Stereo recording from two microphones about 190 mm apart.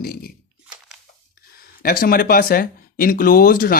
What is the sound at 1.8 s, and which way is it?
Speech, 50° left (ahead or behind).